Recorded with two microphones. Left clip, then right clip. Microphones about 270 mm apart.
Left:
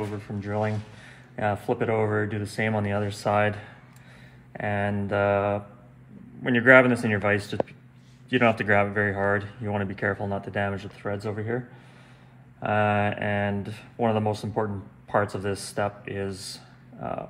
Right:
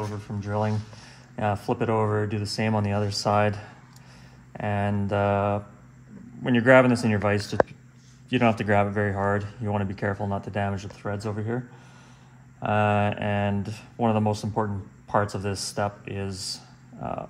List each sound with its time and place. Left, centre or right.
0.4 s a man's voice: right